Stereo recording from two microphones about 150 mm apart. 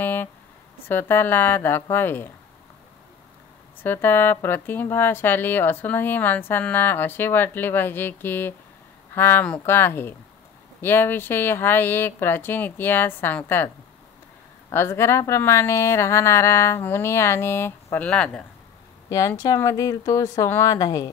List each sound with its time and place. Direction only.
0.0 s a sound: 10° left (ahead or behind)
0.8 s speech: 15° left (ahead or behind)
3.8 s speech: 15° left (ahead or behind)
14.7 s speech: 15° left (ahead or behind)
19.0 s speech: 20° left (ahead or behind)